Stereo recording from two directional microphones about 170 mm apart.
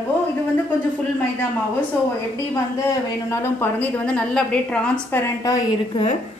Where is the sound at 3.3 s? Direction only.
15° left (ahead or behind).